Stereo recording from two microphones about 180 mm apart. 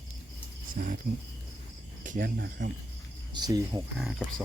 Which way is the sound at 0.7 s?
50° right (ahead or behind).